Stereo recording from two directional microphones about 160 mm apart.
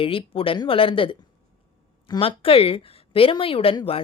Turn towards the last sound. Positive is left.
turn(degrees=35)  # may be behind; listen again after turning